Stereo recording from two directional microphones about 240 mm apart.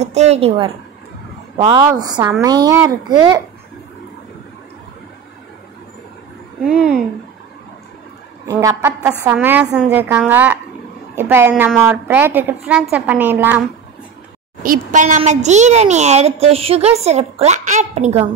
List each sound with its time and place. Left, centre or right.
0.0 s a woman's voice: right
6.6 s speech: centre
8.5 s a woman's voice: centre
14.6 s a woman's voice: right